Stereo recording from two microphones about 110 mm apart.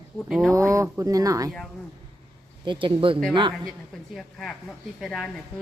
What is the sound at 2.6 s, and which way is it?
Speech, 50° right (ahead or behind).